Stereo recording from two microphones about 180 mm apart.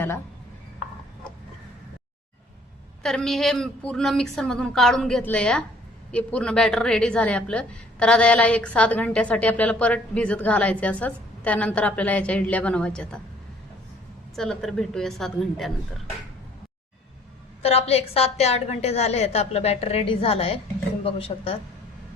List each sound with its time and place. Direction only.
3.0 s a woman's voice: 5° left (ahead or behind)
14.3 s a woman's voice: centre (ahead or behind)
17.6 s a woman's voice: 35° left (ahead or behind)